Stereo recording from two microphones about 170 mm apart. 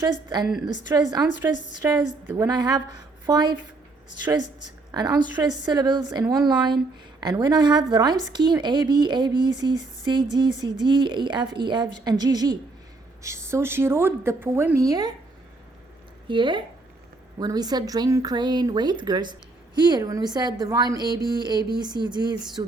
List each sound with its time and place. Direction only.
0.0 s speech: 25° right (ahead or behind)
0.4 s a woman's voice: 5° right (ahead or behind)
0.9 s a woman's voice: 25° right (ahead or behind)
16.2 s speech: 30° right (ahead or behind)